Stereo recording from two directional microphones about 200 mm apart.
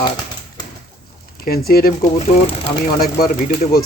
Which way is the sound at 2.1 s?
30° left (ahead or behind).